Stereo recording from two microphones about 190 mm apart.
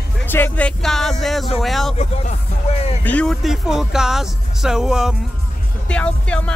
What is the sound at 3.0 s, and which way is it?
Speech, 5° left (ahead or behind).